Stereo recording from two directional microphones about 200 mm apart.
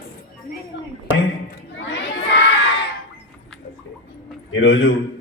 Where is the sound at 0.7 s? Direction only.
65° left (ahead or behind).